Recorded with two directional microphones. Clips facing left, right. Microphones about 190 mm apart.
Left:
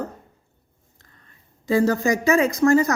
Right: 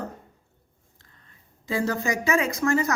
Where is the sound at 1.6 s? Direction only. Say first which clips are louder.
Left 7 dB; 40° left (ahead or behind).